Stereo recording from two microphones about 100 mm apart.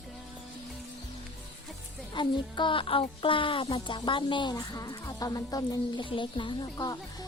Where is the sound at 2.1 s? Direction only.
55° left (ahead or behind).